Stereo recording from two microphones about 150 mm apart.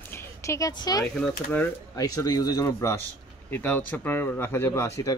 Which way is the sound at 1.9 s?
25° left (ahead or behind).